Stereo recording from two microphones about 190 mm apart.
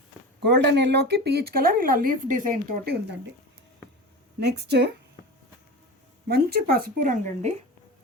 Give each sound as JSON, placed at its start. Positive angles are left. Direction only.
{"t": 0.4, "sound": "speech", "side_deg": -60}
{"t": 4.4, "sound": "speech", "side_deg": -60}
{"t": 6.2, "sound": "speech", "side_deg": -55}